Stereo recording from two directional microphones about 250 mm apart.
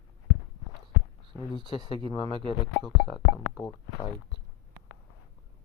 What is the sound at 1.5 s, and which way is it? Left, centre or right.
Speech, centre.